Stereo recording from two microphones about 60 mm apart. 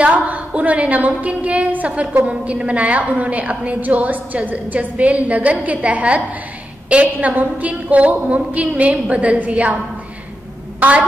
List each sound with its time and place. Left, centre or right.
0.0 s a woman's voice: right
10.8 s speech: right